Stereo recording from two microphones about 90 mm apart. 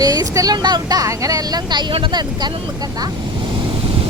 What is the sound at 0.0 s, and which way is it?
Speech, 45° right (ahead or behind).